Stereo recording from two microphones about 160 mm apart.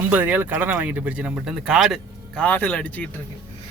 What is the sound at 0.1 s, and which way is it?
Speech, 10° right (ahead or behind).